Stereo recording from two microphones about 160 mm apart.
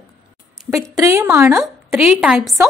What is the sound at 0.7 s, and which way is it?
A woman's voice, 20° right (ahead or behind).